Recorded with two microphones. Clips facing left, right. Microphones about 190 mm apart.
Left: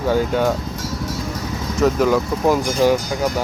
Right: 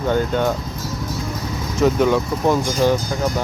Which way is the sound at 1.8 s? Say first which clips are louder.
Even; centre (ahead or behind).